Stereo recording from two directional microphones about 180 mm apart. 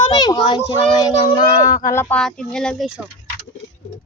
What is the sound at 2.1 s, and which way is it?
Speech, 5° left (ahead or behind).